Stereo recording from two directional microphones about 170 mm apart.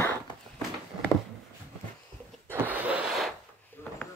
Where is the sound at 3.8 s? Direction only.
15° left (ahead or behind).